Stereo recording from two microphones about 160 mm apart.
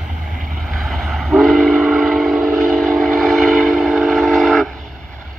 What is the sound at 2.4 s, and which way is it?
Train, 15° right (ahead or behind).